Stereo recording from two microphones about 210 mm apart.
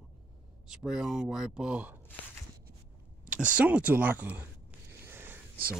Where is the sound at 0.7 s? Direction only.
Centre (ahead or behind).